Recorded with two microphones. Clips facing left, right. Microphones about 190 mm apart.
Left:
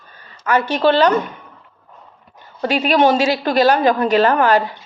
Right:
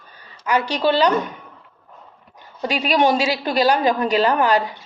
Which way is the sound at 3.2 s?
45° left (ahead or behind).